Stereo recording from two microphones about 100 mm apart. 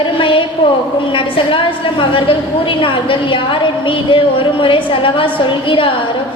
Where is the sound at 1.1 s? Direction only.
60° left (ahead or behind).